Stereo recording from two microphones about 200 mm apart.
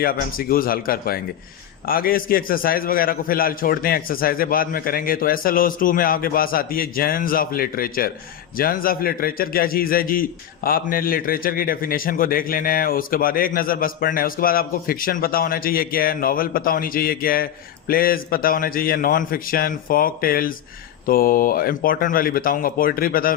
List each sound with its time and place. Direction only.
0.0 s a man's voice: 45° left (ahead or behind)